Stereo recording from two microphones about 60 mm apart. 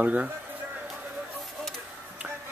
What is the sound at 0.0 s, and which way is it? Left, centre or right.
Speech, right.